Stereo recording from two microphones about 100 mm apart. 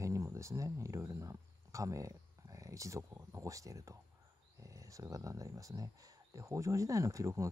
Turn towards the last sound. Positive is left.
turn(degrees=-35)  # may be behind; listen again after turning